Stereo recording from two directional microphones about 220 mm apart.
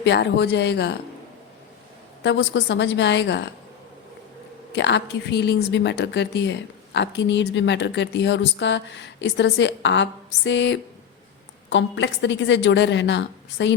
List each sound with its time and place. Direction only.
0.0 s a woman's voice: 50° left (ahead or behind)
2.2 s a woman's voice: 55° left (ahead or behind)
4.7 s a woman's voice: 55° left (ahead or behind)